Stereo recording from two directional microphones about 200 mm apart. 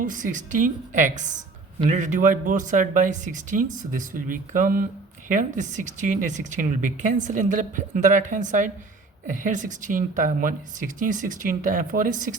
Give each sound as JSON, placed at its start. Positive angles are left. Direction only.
{"t": 0.0, "sound": "a woman's voice", "side_deg": -40}